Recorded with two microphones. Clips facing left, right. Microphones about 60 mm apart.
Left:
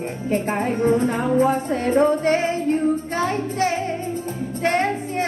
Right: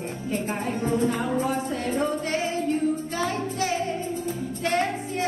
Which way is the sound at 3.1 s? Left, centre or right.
Left.